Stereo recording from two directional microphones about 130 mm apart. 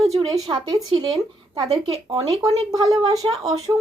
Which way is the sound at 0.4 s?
30° right (ahead or behind).